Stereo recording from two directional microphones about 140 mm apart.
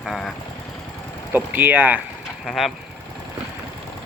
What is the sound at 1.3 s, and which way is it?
Speech, 15° right (ahead or behind).